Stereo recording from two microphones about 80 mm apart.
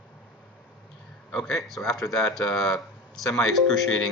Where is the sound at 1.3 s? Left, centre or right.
Centre.